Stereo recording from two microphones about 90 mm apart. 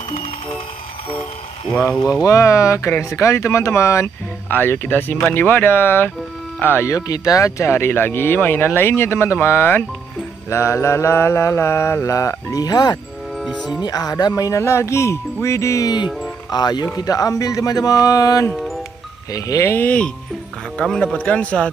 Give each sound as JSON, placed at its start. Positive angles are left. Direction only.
{"t": 2.2, "sound": "mantra", "side_deg": 35}
{"t": 4.5, "sound": "speech", "side_deg": 20}
{"t": 6.9, "sound": "speech", "side_deg": 40}
{"t": 10.5, "sound": "mantra", "side_deg": 30}
{"t": 16.4, "sound": "speech", "side_deg": 50}
{"t": 19.3, "sound": "mantra", "side_deg": 40}
{"t": 19.7, "sound": "speech", "side_deg": 20}
{"t": 20.7, "sound": "speech", "side_deg": 10}